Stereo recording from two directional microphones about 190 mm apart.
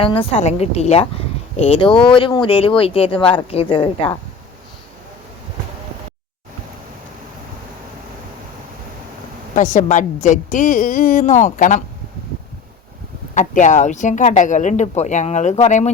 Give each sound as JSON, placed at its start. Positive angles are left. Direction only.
{"t": 0.0, "sound": "speech", "side_deg": 30}
{"t": 9.6, "sound": "a woman's voice", "side_deg": 40}
{"t": 13.3, "sound": "speech", "side_deg": 40}